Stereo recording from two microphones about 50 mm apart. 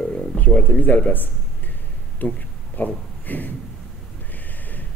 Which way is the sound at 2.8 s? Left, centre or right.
Left.